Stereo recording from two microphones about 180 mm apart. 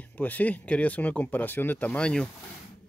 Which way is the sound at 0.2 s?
10° left (ahead or behind).